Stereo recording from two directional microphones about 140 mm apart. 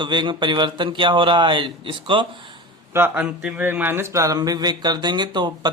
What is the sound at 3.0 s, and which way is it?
Speech, 15° right (ahead or behind).